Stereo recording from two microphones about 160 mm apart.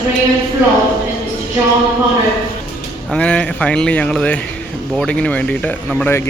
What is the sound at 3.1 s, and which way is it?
Speech, 5° left (ahead or behind).